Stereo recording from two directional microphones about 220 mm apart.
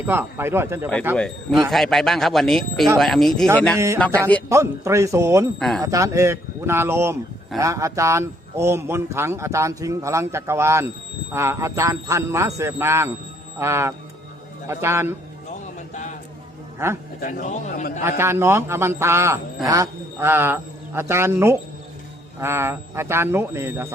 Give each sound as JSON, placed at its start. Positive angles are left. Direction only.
{"t": 0.0, "sound": "a man's voice", "side_deg": -10}
{"t": 1.1, "sound": "speech", "side_deg": 5}
{"t": 4.4, "sound": "a man's voice", "side_deg": -15}
{"t": 5.5, "sound": "speech", "side_deg": 0}
{"t": 5.8, "sound": "a man's voice", "side_deg": -15}
{"t": 16.7, "sound": "a man's voice", "side_deg": -10}
{"t": 17.2, "sound": "a man's voice", "side_deg": 35}
{"t": 18.2, "sound": "a man's voice", "side_deg": -10}